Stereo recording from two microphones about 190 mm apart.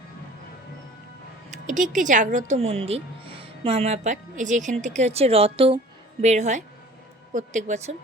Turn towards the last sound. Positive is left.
turn(degrees=-40)  # may be behind; listen again after turning